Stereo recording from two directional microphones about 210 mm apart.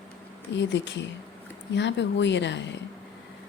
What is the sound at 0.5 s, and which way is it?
Speech, 55° left (ahead or behind).